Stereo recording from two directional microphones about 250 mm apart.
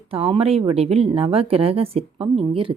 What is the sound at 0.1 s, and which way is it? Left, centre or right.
Speech, right.